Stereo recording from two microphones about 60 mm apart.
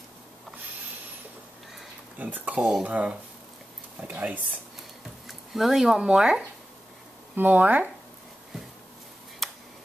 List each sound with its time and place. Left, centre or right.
2.1 s speech: right
5.2 s speech: centre
7.3 s speech: right
9.4 s a sound: centre